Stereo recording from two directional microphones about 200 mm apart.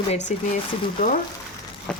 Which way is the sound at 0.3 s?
35° left (ahead or behind).